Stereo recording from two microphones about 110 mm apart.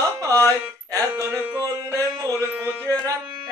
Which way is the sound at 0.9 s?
30° right (ahead or behind).